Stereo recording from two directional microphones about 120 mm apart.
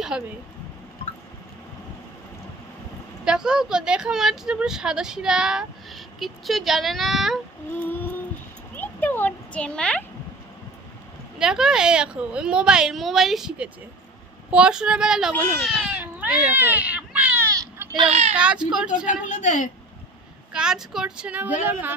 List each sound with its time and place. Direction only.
3.3 s speech: 5° right (ahead or behind)
7.8 s a sound: 15° left (ahead or behind)
11.3 s a child's voice: 5° right (ahead or behind)
17.9 s a child's voice: 60° right (ahead or behind)
18.3 s speech: 10° right (ahead or behind)
19.2 s a woman's voice: 90° left
20.5 s speech: 5° right (ahead or behind)